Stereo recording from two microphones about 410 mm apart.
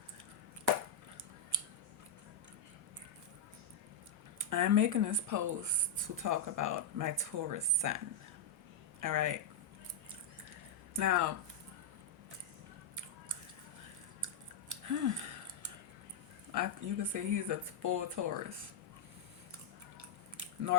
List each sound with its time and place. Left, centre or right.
1.5 s scissors: right
4.4 s speech: right
10.9 s speech: right
14.7 s scissors: right
16.5 s speech: right
20.0 s squish: right